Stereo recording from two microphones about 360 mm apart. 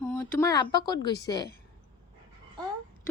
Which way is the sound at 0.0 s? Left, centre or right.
Centre.